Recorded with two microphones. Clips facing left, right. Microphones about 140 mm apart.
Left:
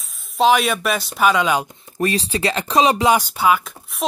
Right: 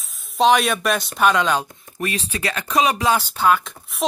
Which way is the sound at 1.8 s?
35° left (ahead or behind).